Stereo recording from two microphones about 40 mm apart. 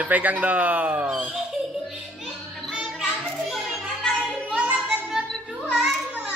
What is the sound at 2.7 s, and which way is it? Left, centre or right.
Music, centre.